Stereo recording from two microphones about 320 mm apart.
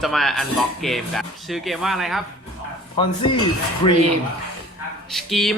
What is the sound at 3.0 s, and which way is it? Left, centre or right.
Dishes, centre.